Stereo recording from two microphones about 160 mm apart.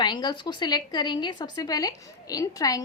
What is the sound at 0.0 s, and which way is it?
A woman's voice, 25° left (ahead or behind).